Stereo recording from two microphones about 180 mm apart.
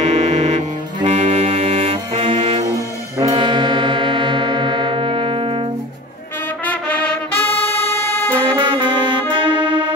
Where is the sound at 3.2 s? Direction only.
30° right (ahead or behind).